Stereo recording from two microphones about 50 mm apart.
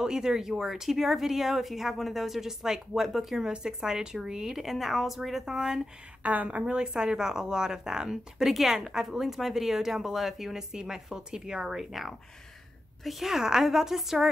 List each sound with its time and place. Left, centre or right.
0.0 s speech: centre
6.2 s a woman's voice: right
6.6 s speech: centre